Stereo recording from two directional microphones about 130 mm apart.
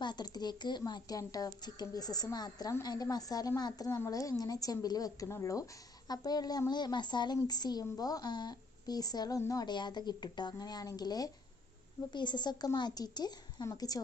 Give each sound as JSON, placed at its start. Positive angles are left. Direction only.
{"t": 0.0, "sound": "a woman's voice", "side_deg": 35}